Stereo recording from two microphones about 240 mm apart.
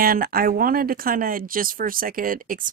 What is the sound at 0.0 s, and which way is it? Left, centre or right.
Speech, right.